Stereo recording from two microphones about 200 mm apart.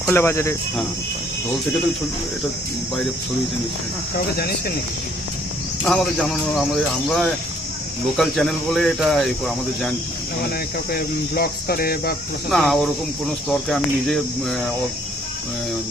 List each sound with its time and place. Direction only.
0.1 s speech: 10° left (ahead or behind)
5.8 s speech: 5° left (ahead or behind)
8.1 s speech: centre (ahead or behind)
10.9 s cricket: 50° left (ahead or behind)
12.5 s speech: centre (ahead or behind)